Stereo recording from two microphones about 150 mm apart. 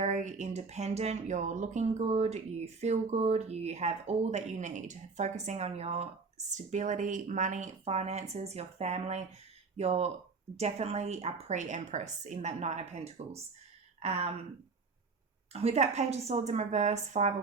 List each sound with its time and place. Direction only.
0.0 s speech: 50° right (ahead or behind)
15.5 s speech: 45° right (ahead or behind)